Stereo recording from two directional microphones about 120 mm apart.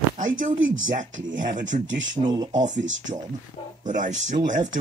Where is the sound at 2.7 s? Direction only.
90° right.